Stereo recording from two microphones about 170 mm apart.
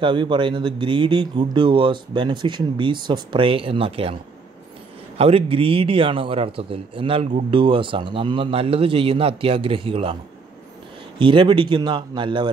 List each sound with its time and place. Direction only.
0.0 s a man's voice: 30° right (ahead or behind)
11.1 s speech: 30° right (ahead or behind)